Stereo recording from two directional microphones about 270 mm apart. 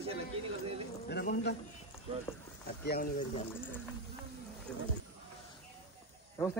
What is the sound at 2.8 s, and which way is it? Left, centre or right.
Speech, left.